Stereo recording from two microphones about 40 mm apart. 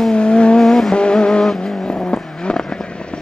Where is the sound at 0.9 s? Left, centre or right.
Left.